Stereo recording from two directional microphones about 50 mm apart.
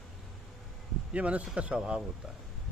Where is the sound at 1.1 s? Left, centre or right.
Right.